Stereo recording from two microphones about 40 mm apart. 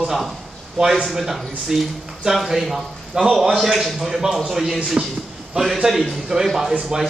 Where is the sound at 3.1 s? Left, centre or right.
Right.